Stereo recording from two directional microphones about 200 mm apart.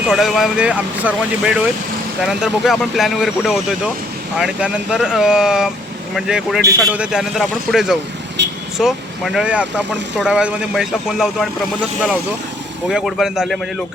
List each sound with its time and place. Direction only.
0.1 s speech: centre (ahead or behind)
8.4 s vehicle: 60° right (ahead or behind)
8.8 s speech: centre (ahead or behind)
12.9 s speech: centre (ahead or behind)